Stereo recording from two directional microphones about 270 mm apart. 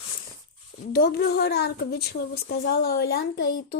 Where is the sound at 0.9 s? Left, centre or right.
Left.